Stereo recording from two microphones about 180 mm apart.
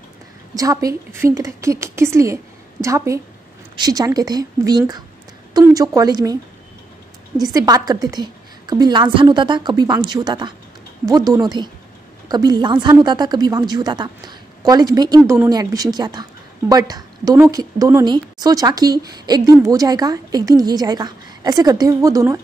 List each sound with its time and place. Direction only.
0.6 s a woman's voice: 20° right (ahead or behind)
7.5 s speech: 20° right (ahead or behind)